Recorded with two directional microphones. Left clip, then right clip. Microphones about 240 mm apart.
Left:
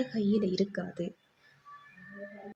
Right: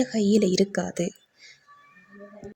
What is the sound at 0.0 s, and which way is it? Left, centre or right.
A woman's voice, right.